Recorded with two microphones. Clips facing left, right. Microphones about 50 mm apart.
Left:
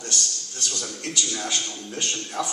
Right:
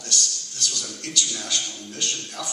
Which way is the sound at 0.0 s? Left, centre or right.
Left.